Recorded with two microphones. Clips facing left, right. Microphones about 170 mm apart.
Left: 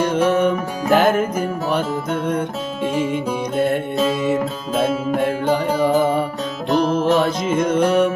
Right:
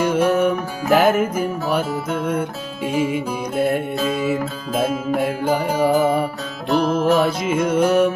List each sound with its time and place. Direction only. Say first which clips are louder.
0.0 s music: even; 10° right (ahead or behind)
6.7 s music: left 1 dB; 35° left (ahead or behind)
7.0 s music: even; 10° right (ahead or behind)